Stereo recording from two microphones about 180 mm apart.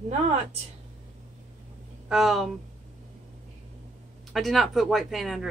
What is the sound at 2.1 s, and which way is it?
Speech, centre (ahead or behind).